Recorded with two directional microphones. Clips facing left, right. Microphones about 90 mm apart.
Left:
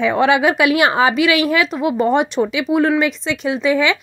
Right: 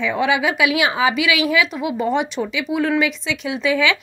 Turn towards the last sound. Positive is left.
turn(degrees=30)  # may be behind; listen again after turning